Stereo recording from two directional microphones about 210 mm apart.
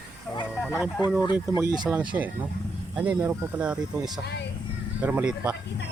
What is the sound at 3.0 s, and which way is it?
Speech, 5° right (ahead or behind).